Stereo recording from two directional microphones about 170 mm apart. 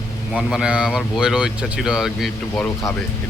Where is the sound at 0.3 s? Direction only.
5° right (ahead or behind).